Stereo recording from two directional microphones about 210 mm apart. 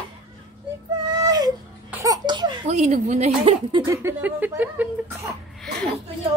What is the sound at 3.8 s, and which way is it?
Speech, 15° right (ahead or behind).